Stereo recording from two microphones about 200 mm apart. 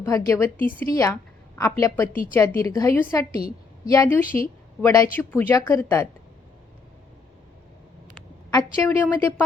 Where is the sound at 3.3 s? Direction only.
45° left (ahead or behind).